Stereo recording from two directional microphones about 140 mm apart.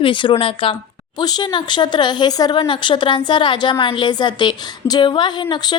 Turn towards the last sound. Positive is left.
turn(degrees=35)  # may be behind; listen again after turning